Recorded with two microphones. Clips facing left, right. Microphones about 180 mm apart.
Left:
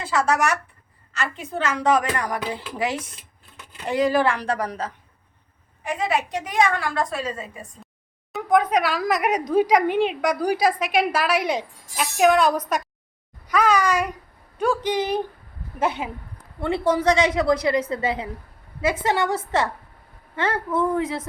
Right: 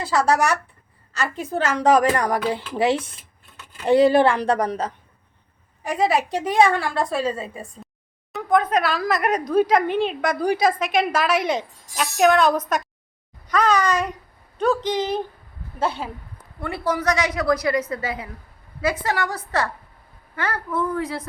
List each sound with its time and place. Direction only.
0.0 s a woman's voice: 40° right (ahead or behind)
8.4 s a woman's voice: 15° left (ahead or behind)